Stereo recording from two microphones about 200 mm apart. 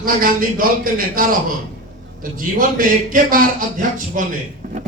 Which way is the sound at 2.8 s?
45° right (ahead or behind).